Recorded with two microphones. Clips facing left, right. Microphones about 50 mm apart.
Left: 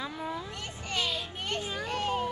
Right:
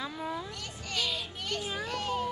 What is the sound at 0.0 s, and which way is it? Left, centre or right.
Children playing, centre.